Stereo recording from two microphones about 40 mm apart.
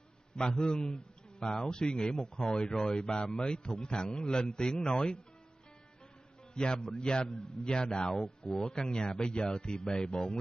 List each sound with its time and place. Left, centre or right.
0.4 s a man's voice: centre
6.5 s a man's voice: left